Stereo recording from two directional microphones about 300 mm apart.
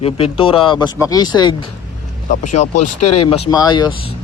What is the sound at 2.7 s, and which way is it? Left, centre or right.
Speech, left.